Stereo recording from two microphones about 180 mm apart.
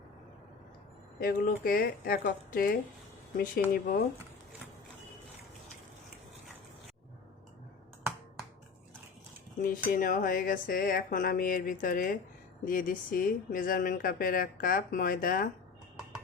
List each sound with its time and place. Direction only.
1.2 s speech: 55° left (ahead or behind)
9.6 s speech: 50° left (ahead or behind)